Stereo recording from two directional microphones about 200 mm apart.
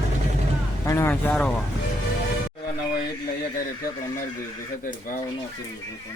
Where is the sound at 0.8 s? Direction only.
15° left (ahead or behind).